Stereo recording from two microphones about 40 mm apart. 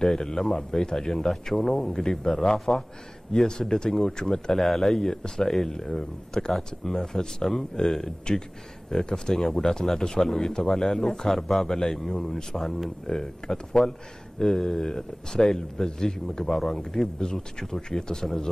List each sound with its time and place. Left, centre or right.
0.0 s a man's voice: centre
5.1 s a man's voice: left